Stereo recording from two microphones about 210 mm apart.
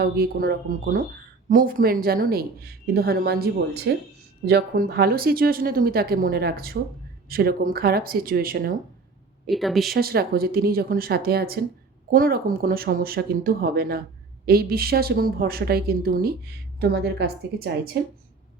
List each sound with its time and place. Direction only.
0.0 s a woman's voice: 45° right (ahead or behind)
9.5 s speech: centre (ahead or behind)
9.9 s a woman's voice: 45° right (ahead or behind)